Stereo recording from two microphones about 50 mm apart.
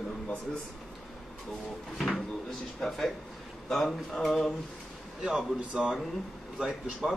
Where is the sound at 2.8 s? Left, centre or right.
Centre.